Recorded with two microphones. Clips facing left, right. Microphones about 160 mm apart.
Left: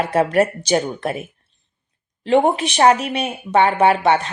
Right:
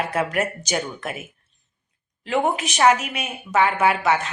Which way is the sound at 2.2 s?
30° left (ahead or behind).